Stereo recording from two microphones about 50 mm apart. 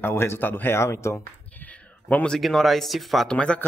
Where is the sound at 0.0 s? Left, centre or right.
Left.